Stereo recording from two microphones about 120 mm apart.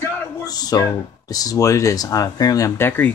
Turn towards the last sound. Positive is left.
turn(degrees=15)  # may be behind; listen again after turning